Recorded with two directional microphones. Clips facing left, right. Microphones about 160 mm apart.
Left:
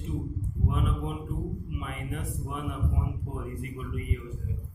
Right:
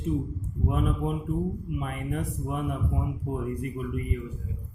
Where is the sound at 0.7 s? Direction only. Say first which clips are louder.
Right 6 dB; 45° right (ahead or behind).